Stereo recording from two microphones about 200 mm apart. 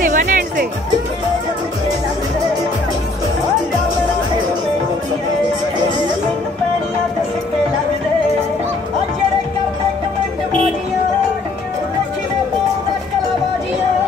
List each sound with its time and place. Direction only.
0.0 s music: 40° right (ahead or behind)